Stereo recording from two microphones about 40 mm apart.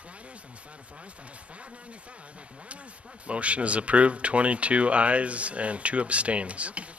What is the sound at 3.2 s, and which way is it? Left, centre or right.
Speech, right.